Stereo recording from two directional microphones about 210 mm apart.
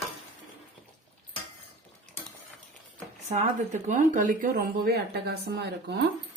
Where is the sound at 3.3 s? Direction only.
35° right (ahead or behind); by 6.0 s 55° right (ahead or behind).